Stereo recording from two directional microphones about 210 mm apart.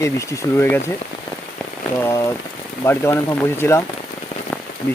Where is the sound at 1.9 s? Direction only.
10° left (ahead or behind).